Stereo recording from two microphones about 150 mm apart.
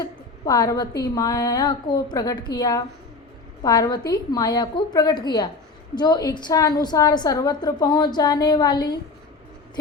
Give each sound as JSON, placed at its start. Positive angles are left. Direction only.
{"t": 0.0, "sound": "a woman's voice", "side_deg": 25}